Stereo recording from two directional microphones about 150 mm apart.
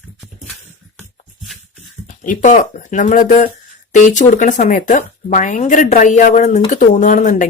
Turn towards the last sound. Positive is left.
turn(degrees=55)  # may be behind; listen again after turning